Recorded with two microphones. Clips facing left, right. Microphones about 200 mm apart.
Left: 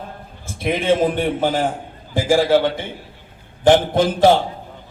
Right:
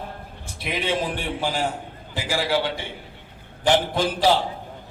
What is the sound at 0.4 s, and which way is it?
A man's voice, 50° left (ahead or behind).